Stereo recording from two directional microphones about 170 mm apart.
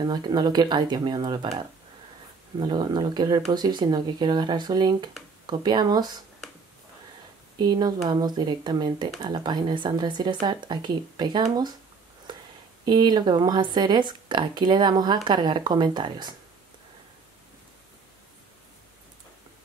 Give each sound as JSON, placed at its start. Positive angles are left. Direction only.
{"t": 0.0, "sound": "speech", "side_deg": -25}
{"t": 7.5, "sound": "speech", "side_deg": -25}
{"t": 12.3, "sound": "a sound", "side_deg": -25}
{"t": 12.8, "sound": "speech", "side_deg": -25}